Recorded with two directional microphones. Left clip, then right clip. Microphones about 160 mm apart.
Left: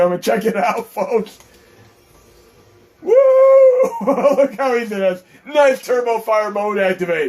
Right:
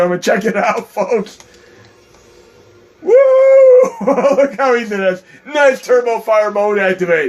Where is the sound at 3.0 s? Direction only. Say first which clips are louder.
Right 2 dB; 30° right (ahead or behind).